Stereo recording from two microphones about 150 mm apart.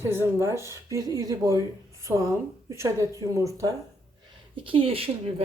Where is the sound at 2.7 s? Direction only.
20° right (ahead or behind).